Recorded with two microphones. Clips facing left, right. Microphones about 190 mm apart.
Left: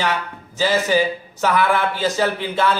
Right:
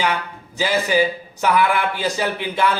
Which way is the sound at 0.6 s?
15° right (ahead or behind).